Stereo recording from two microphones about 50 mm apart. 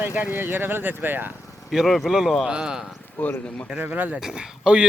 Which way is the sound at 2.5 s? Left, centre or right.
Centre.